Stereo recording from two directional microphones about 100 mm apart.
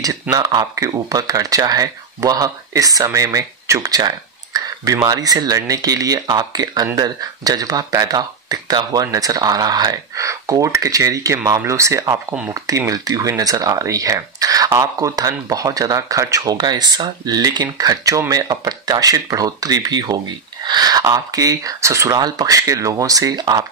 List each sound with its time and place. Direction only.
0.0 s speech: 40° right (ahead or behind)
16.5 s speech: 45° right (ahead or behind)